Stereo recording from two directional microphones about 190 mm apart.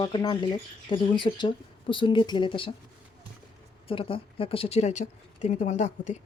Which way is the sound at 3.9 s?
30° left (ahead or behind).